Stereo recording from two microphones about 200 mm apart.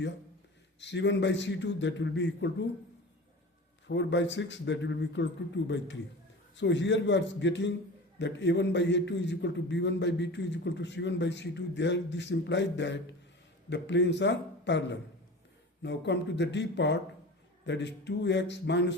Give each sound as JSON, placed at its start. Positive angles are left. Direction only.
{"t": 0.8, "sound": "a man's voice", "side_deg": 60}
{"t": 3.8, "sound": "a man's voice", "side_deg": 60}